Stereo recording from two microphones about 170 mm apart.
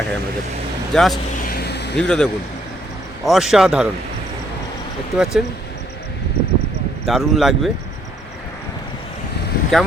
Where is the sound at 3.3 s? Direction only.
Centre (ahead or behind).